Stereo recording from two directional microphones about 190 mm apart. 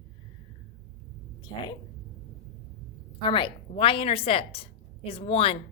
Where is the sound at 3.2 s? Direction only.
25° left (ahead or behind).